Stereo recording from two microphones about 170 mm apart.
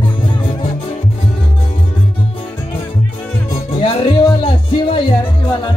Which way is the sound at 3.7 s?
30° left (ahead or behind).